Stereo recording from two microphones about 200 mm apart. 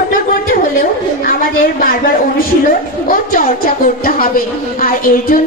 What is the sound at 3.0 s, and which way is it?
A woman's voice, 45° left (ahead or behind).